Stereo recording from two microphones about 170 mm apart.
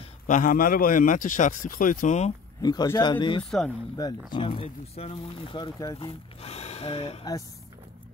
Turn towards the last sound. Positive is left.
turn(degrees=35)  # may be behind; listen again after turning